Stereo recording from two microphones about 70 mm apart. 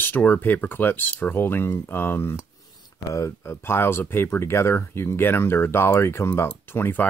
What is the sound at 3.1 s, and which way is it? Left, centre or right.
Speech, left.